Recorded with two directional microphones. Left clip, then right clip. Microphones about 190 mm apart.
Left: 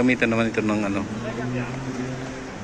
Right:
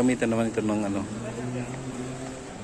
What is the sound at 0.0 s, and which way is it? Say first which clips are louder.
A man's voice: left 4 dB; 30° right (ahead or behind).